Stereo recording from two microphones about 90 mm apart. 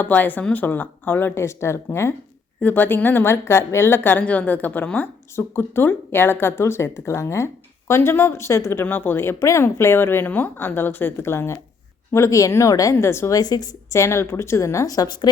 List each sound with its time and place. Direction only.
0.0 s speech: 20° left (ahead or behind)
2.6 s a woman's voice: 20° left (ahead or behind)
13.3 s a woman's voice: 45° left (ahead or behind)
13.9 s a woman's voice: 30° left (ahead or behind); by 15.3 s 50° left (ahead or behind)